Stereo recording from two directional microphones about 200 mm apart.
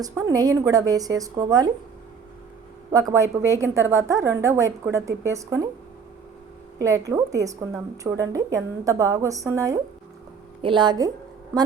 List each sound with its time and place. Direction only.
0.0 s a woman's voice: 15° right (ahead or behind)
2.9 s a woman's voice: 15° right (ahead or behind)
6.7 s a woman's voice: 15° right (ahead or behind)